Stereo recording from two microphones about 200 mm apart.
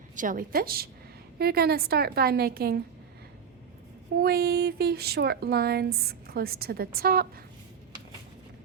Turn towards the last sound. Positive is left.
turn(degrees=-45)  # may be behind; listen again after turning